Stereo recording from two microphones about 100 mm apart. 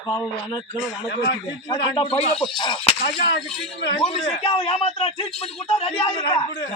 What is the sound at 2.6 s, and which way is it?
Speech, 50° left (ahead or behind).